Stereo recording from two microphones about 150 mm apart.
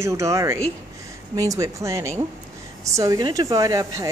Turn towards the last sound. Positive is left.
turn(degrees=-20)  # may be behind; listen again after turning